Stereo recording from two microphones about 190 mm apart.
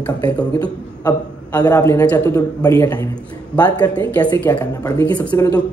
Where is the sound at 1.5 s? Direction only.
20° left (ahead or behind).